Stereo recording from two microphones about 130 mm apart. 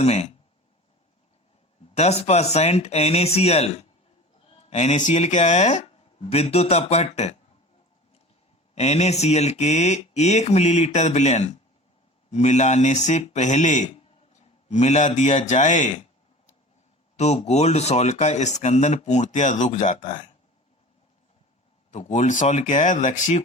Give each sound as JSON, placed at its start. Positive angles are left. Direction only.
{"t": 0.0, "sound": "speech", "side_deg": 55}
{"t": 2.0, "sound": "speech", "side_deg": 55}
{"t": 8.7, "sound": "a man's voice", "side_deg": 55}
{"t": 17.2, "sound": "speech", "side_deg": 55}
{"t": 21.9, "sound": "speech", "side_deg": 70}